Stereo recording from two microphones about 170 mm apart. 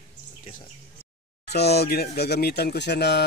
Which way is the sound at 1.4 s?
70° left (ahead or behind).